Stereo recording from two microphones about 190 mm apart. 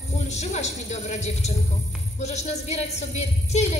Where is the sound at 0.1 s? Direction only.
35° left (ahead or behind).